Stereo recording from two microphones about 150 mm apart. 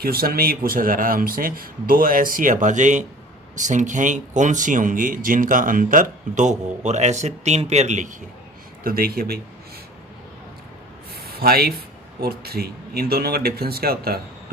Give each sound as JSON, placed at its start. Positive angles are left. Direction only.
{"t": 0.0, "sound": "speech", "side_deg": -85}
{"t": 8.8, "sound": "speech", "side_deg": -75}
{"t": 11.1, "sound": "a sound", "side_deg": -90}
{"t": 12.2, "sound": "speech", "side_deg": -90}